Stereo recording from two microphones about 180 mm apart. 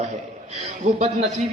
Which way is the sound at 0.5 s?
40° right (ahead or behind).